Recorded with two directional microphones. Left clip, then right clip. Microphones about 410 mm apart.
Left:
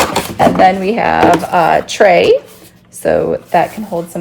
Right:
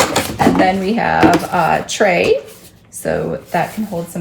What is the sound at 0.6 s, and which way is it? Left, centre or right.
A woman's voice, centre.